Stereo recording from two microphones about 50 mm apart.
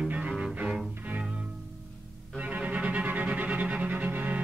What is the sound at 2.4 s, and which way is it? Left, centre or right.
Music, right.